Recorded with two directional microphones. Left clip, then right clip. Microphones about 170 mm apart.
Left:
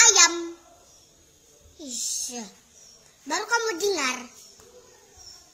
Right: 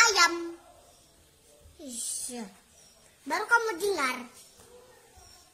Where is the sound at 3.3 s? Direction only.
20° right (ahead or behind).